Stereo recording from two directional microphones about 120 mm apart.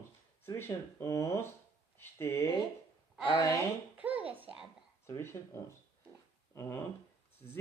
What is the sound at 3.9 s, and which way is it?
Hands, 10° right (ahead or behind).